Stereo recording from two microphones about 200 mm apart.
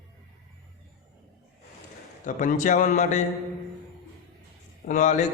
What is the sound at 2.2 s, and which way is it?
A man's voice, 40° left (ahead or behind).